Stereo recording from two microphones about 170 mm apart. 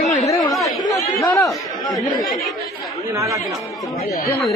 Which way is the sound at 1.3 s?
20° left (ahead or behind).